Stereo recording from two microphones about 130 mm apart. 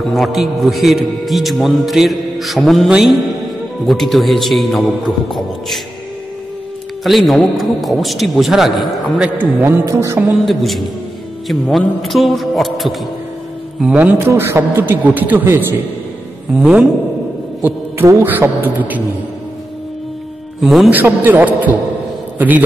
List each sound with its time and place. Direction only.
0.1 s a man's voice: centre (ahead or behind)
7.0 s a man's voice: centre (ahead or behind)
9.4 s a man's voice: 15° right (ahead or behind)
10.4 s a man's voice: centre (ahead or behind); by 15.8 s 15° right (ahead or behind)
16.5 s a man's voice: 5° right (ahead or behind)
20.6 s a man's voice: centre (ahead or behind)
20.9 s a man's voice: 15° right (ahead or behind)